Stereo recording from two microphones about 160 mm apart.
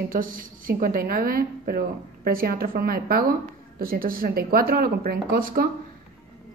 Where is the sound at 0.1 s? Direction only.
60° right (ahead or behind).